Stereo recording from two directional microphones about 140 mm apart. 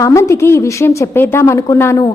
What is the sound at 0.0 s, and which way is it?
A woman's voice, 20° left (ahead or behind).